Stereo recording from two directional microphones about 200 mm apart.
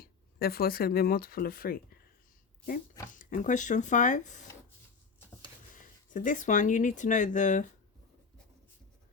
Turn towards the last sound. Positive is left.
turn(degrees=40)  # may be behind; listen again after turning